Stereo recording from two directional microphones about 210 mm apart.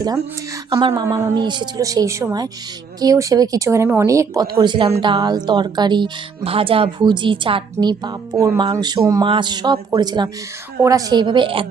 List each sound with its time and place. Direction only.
0.0 s a woman's voice: 15° right (ahead or behind)